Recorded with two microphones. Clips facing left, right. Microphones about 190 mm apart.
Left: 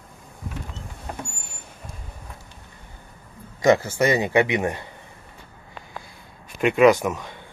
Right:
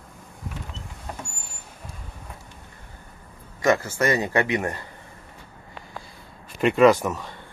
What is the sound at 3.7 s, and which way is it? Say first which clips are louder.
Speech: left 3 dB; 20° left (ahead or behind).